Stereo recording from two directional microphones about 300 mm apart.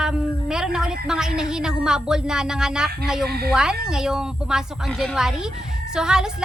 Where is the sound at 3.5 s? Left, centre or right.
Centre.